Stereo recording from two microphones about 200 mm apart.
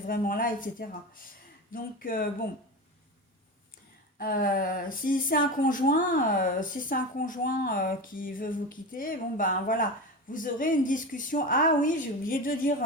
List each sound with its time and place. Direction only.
0.0 s speech: 45° left (ahead or behind)
4.2 s a woman's voice: 45° left (ahead or behind)